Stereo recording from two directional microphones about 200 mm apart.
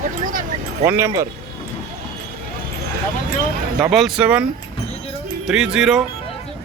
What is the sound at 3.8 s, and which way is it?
Speech, centre (ahead or behind).